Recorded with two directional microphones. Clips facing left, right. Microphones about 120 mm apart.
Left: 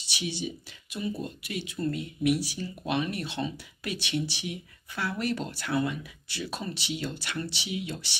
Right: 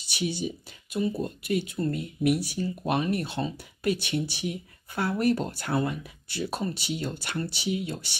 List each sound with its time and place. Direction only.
0.1 s speech: 50° right (ahead or behind)
2.8 s speech: 40° right (ahead or behind)